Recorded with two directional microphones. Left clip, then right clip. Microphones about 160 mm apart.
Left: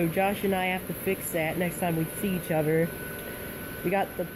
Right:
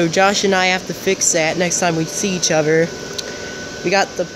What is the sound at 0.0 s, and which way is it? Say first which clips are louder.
Speech: right 12 dB; 20° right (ahead or behind).